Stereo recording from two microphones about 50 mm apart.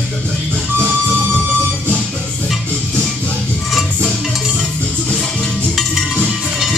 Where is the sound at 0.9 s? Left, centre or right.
Right.